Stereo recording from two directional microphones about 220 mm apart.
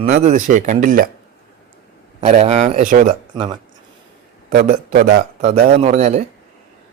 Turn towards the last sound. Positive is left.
turn(degrees=-30)  # may be behind; listen again after turning